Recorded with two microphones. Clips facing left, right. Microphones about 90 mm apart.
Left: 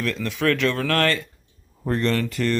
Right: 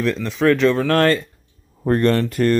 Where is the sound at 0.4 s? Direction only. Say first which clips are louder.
Right 6 dB; 35° right (ahead or behind).